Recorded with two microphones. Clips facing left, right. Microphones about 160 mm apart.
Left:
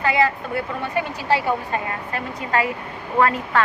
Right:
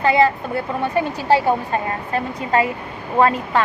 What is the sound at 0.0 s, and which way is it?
A woman's voice, 30° right (ahead or behind).